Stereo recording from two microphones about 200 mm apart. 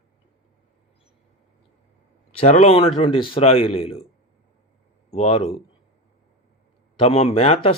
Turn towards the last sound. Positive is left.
turn(degrees=30)  # may be behind; listen again after turning